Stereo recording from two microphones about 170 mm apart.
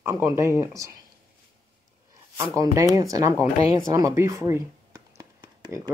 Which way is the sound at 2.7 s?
20° right (ahead or behind).